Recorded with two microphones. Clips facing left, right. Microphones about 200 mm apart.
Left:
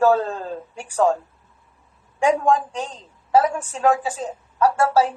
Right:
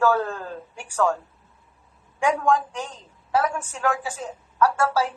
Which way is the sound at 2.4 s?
30° left (ahead or behind).